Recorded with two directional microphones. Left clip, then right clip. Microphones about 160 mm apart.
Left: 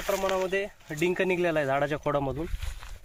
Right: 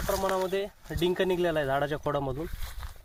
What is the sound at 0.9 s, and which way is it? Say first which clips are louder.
Speech: even; 35° left (ahead or behind).